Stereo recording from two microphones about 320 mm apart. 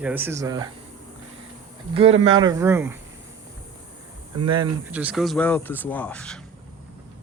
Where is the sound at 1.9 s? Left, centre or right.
Centre.